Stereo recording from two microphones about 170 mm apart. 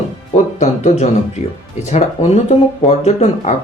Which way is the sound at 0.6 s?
40° left (ahead or behind).